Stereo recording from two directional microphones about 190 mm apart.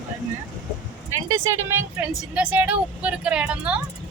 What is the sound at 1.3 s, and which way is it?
Speech, 15° right (ahead or behind).